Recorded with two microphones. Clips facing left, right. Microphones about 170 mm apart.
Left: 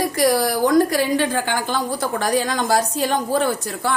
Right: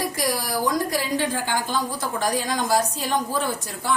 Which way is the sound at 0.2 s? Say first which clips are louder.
Left 10 dB; 70° left (ahead or behind).